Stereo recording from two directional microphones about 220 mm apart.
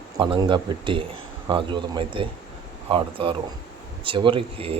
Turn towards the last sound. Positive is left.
turn(degrees=-25)  # may be behind; listen again after turning